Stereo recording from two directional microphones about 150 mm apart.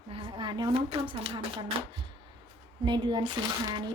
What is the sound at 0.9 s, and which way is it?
Speech, 35° right (ahead or behind).